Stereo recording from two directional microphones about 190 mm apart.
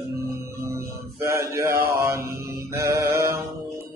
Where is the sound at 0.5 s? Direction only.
15° right (ahead or behind).